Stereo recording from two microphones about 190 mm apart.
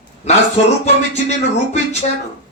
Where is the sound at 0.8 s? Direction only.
35° left (ahead or behind).